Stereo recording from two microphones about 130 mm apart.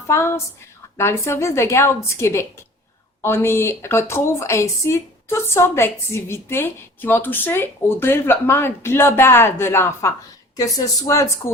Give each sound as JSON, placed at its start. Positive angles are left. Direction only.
{"t": 0.1, "sound": "a woman's voice", "side_deg": 20}